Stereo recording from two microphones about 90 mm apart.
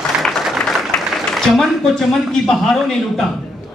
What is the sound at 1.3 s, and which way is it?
A man's voice, centre (ahead or behind).